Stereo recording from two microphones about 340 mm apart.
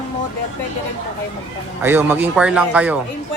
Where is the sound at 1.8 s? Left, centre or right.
Centre.